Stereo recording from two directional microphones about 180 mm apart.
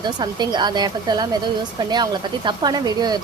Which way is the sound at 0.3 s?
25° right (ahead or behind).